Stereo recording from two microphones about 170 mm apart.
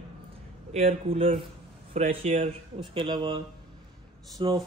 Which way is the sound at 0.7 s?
35° right (ahead or behind).